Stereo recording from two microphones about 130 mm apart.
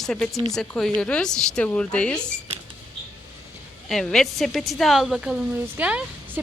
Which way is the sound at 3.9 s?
5° left (ahead or behind).